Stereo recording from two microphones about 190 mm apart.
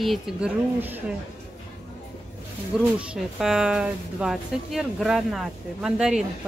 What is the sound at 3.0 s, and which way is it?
A woman's voice, centre (ahead or behind).